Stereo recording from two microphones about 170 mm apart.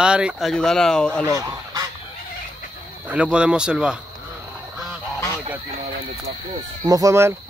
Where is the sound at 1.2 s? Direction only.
20° right (ahead or behind).